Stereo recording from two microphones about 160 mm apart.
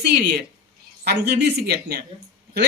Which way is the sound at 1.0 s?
90° right.